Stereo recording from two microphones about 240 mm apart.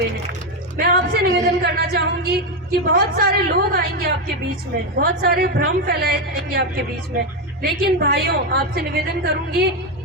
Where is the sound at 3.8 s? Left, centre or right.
Right.